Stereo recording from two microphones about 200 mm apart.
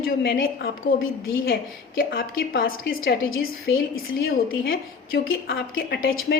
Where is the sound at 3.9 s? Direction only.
80° left.